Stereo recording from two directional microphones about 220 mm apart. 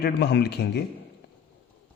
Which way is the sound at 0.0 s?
45° left (ahead or behind).